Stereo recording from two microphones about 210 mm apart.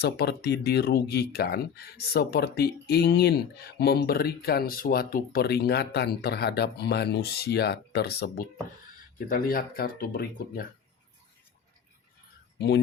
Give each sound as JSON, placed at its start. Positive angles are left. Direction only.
{"t": 0.0, "sound": "speech", "side_deg": 50}
{"t": 12.5, "sound": "speech", "side_deg": 55}